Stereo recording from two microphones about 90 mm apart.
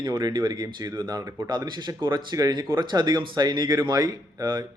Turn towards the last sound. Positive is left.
turn(degrees=-50)  # may be behind; listen again after turning